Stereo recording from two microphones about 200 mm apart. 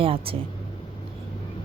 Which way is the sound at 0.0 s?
25° right (ahead or behind).